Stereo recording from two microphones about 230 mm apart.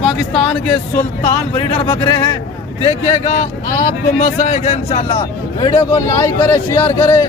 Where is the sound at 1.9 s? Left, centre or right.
Centre.